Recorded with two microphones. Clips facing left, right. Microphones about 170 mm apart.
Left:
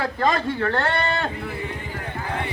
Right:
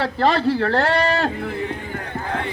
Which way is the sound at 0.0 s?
30° right (ahead or behind).